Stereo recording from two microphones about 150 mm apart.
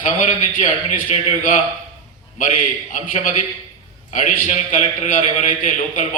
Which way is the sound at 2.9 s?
55° left (ahead or behind).